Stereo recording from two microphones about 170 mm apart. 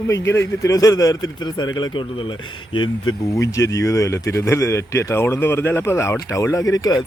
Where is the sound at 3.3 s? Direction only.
20° left (ahead or behind).